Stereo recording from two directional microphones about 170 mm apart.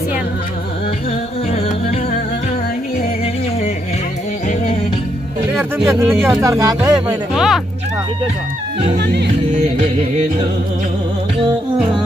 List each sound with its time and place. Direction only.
5.9 s speech: 15° right (ahead or behind)
6.8 s speech: 5° right (ahead or behind)
8.9 s music: 80° right